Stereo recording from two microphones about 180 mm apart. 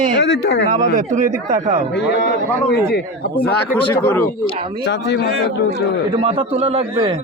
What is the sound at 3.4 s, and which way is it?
Speech, 10° left (ahead or behind).